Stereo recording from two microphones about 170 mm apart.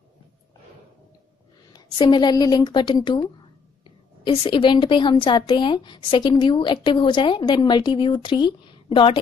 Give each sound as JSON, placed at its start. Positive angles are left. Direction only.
{"t": 1.7, "sound": "a woman's voice", "side_deg": 25}